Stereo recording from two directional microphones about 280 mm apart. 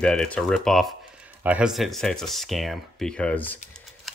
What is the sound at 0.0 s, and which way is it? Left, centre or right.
Speech, centre.